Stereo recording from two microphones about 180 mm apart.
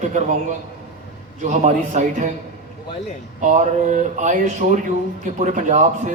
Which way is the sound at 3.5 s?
40° right (ahead or behind).